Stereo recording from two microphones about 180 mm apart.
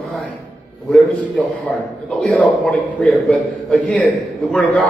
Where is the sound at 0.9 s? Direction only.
5° left (ahead or behind).